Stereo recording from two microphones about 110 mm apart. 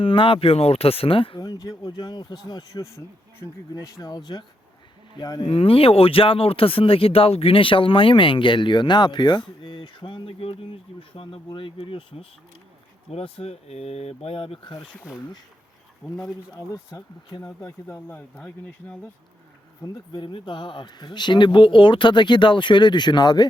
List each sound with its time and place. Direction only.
0.0 s speech: 50° left (ahead or behind)
1.4 s speech: 35° left (ahead or behind)
5.5 s speech: 60° left (ahead or behind)
14.8 s speech: centre (ahead or behind)
16.6 s speech: 35° left (ahead or behind)
18.3 s speech: 15° left (ahead or behind)
19.8 s speech: 35° left (ahead or behind)
20.2 s speech: 50° left (ahead or behind)